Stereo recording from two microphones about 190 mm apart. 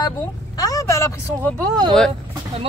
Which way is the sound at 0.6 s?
20° left (ahead or behind).